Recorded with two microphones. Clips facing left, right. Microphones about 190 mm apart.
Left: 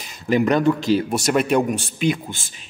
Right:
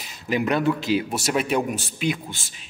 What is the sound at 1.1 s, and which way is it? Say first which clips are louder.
A man's voice: left 5 dB; centre (ahead or behind).